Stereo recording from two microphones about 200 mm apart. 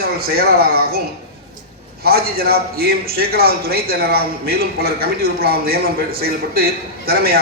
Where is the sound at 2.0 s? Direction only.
50° right (ahead or behind).